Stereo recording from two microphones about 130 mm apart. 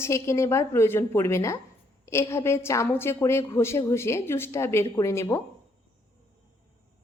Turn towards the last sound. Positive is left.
turn(degrees=20)  # may be behind; listen again after turning